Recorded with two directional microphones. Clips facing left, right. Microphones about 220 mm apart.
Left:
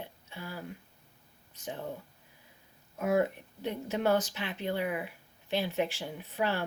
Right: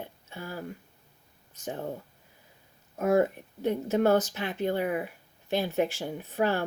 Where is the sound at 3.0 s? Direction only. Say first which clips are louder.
Right 4 dB; 45° right (ahead or behind).